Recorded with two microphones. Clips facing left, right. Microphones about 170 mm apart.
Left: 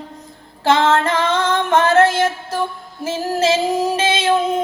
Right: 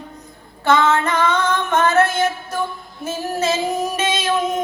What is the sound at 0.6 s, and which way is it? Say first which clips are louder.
Female singing: left 2 dB; 30° left (ahead or behind).